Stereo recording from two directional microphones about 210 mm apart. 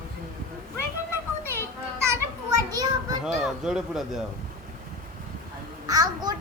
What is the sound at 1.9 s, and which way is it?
Children playing, 15° right (ahead or behind).